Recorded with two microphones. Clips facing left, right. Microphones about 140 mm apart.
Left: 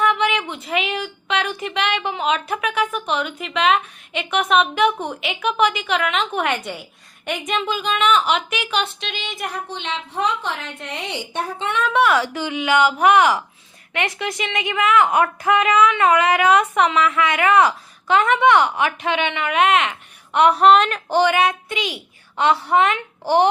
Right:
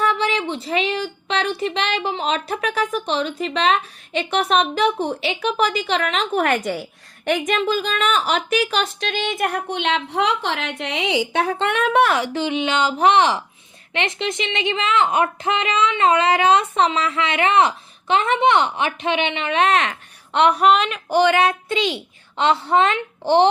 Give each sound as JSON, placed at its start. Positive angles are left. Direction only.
{"t": 0.0, "sound": "a woman's voice", "side_deg": -35}
{"t": 12.1, "sound": "a woman's voice", "side_deg": -25}
{"t": 20.7, "sound": "female singing", "side_deg": 0}
{"t": 21.1, "sound": "speech", "side_deg": -15}
{"t": 21.3, "sound": "a woman's voice", "side_deg": -30}